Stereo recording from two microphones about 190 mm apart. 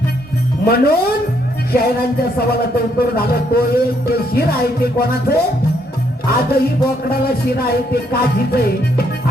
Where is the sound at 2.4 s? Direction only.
55° left (ahead or behind).